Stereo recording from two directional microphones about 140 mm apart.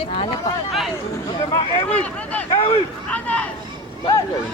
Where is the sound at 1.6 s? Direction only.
40° left (ahead or behind).